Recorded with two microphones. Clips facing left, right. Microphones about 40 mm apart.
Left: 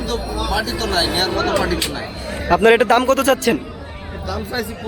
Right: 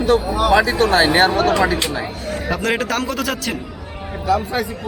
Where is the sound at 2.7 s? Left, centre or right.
Centre.